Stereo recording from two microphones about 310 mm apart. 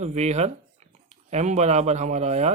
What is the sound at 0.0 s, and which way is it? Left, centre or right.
Speech, right.